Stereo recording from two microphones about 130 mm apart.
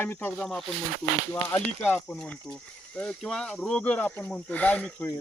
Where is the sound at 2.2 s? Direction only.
5° left (ahead or behind).